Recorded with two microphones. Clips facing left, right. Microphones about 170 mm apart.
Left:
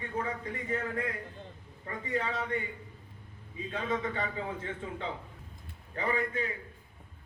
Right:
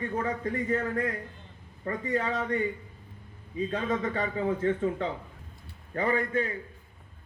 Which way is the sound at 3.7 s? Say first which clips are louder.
Right 2 dB; 45° right (ahead or behind).